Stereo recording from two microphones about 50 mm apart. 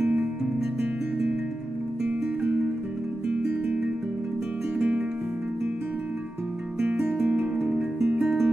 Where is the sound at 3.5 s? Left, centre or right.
Right.